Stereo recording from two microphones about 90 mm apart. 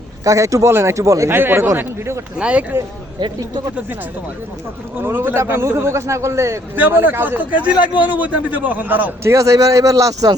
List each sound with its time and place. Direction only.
0.3 s speech: 40° right (ahead or behind)
1.4 s a man's voice: 25° right (ahead or behind)
2.4 s speech: 15° right (ahead or behind)
3.2 s speech: 55° right (ahead or behind)
4.9 s speech: 25° right (ahead or behind)
6.7 s a man's voice: 20° right (ahead or behind)
9.2 s speech: 35° right (ahead or behind)